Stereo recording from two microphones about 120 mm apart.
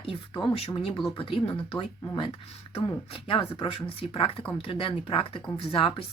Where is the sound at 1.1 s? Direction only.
50° left (ahead or behind).